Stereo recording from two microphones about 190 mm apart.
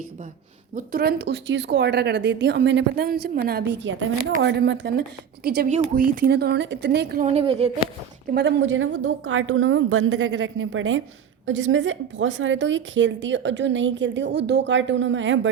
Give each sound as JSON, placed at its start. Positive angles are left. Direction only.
{"t": 0.8, "sound": "speech", "side_deg": -50}
{"t": 5.6, "sound": "speech", "side_deg": -45}
{"t": 7.2, "sound": "a woman's voice", "side_deg": -35}
{"t": 8.3, "sound": "a woman's voice", "side_deg": -65}